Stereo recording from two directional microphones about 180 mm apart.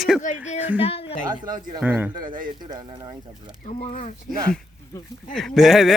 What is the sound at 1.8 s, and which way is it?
Speech, 10° right (ahead or behind).